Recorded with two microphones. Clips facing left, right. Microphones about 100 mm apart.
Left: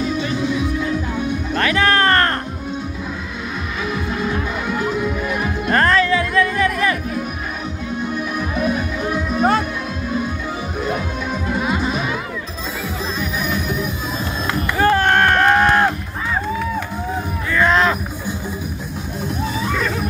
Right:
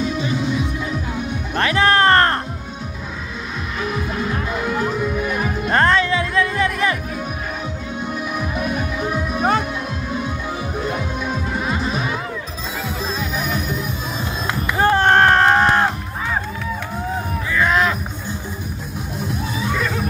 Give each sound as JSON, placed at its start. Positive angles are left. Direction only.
{"t": 1.5, "sound": "music", "side_deg": -25}
{"t": 5.7, "sound": "music", "side_deg": -25}
{"t": 9.1, "sound": "music", "side_deg": -5}
{"t": 11.6, "sound": "music", "side_deg": 5}
{"t": 14.8, "sound": "a sound", "side_deg": -25}
{"t": 17.5, "sound": "a sound", "side_deg": -10}